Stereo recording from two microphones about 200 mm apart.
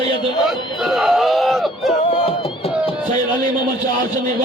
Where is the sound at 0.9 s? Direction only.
Centre (ahead or behind).